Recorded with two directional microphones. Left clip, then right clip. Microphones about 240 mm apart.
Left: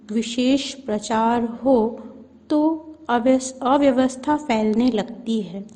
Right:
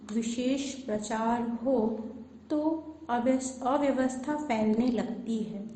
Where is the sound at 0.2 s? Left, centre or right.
Left.